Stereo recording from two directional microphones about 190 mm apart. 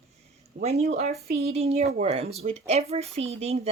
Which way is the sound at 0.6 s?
35° right (ahead or behind).